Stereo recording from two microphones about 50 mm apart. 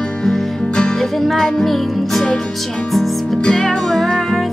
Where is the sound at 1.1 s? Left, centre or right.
Centre.